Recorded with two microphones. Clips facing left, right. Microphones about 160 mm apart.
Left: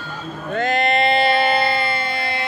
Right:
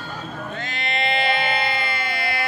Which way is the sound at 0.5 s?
50° left (ahead or behind).